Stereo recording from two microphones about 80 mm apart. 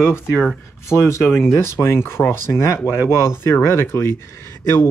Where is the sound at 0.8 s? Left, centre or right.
Left.